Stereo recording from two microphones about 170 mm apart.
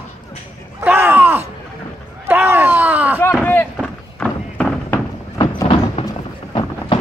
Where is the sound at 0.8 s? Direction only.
15° right (ahead or behind).